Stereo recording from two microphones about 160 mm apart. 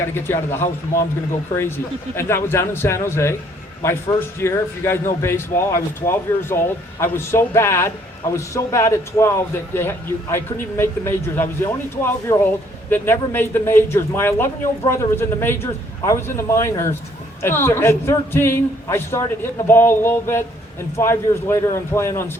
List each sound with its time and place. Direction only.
0.1 s a man's voice: 15° left (ahead or behind)
2.1 s a man's voice: 15° left (ahead or behind)